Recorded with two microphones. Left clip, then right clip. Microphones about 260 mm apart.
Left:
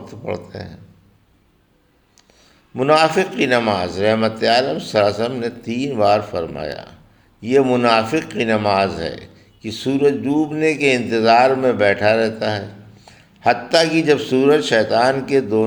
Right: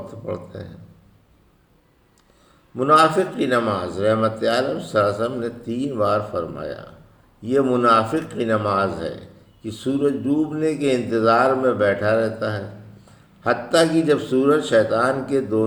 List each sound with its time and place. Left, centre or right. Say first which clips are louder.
0.1 s a man's voice: left 8 dB; left
2.7 s a man's voice: left 1 dB; left